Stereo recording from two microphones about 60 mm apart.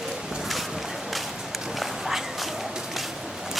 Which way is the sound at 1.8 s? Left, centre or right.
Centre.